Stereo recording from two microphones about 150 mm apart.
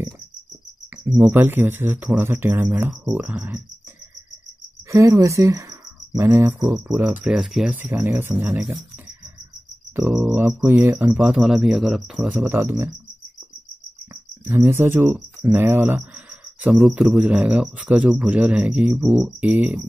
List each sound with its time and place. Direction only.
1.0 s speech: 10° right (ahead or behind)
4.9 s speech: 20° right (ahead or behind)
9.9 s speech: 10° right (ahead or behind)
14.4 s speech: 15° right (ahead or behind)